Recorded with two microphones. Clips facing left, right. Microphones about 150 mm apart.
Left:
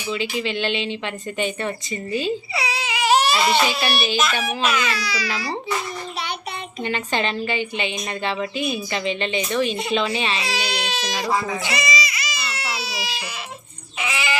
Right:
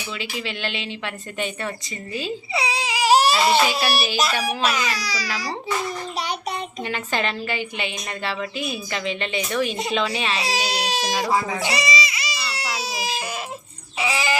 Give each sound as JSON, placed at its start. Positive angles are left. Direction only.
{"t": 0.1, "sound": "a woman's voice", "side_deg": 0}
{"t": 2.6, "sound": "baby cry", "side_deg": -30}
{"t": 3.8, "sound": "speech", "side_deg": -5}
{"t": 4.2, "sound": "a sound", "side_deg": -35}
{"t": 6.8, "sound": "a woman's voice", "side_deg": -5}
{"t": 10.4, "sound": "baby cry", "side_deg": -40}
{"t": 11.3, "sound": "speech", "side_deg": -10}
{"t": 11.6, "sound": "baby cry", "side_deg": -30}
{"t": 14.0, "sound": "bleat", "side_deg": -35}